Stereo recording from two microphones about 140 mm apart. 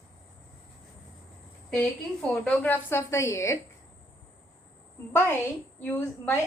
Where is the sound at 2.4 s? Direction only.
10° left (ahead or behind).